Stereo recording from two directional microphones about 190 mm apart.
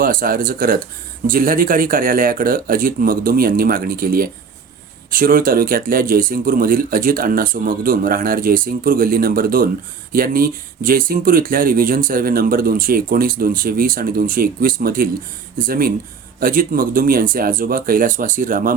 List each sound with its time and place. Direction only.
0.0 s speech: 50° right (ahead or behind)